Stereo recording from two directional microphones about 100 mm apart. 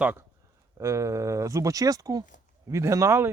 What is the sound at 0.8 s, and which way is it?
Speech, 30° right (ahead or behind).